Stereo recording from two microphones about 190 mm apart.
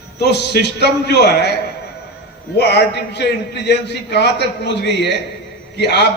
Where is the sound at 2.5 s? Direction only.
65° left (ahead or behind).